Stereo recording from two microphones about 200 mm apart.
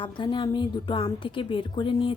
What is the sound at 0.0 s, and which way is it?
A woman's voice, 25° left (ahead or behind).